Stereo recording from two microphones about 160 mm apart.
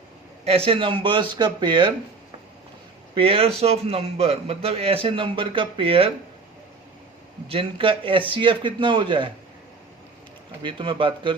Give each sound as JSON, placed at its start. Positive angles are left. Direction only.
{"t": 0.4, "sound": "a man's voice", "side_deg": -40}
{"t": 3.2, "sound": "a man's voice", "side_deg": -35}
{"t": 7.4, "sound": "a man's voice", "side_deg": -35}
{"t": 10.6, "sound": "a man's voice", "side_deg": -30}